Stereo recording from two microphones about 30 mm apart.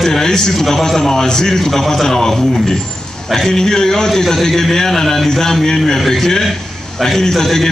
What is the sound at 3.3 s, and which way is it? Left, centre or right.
A man's voice, centre.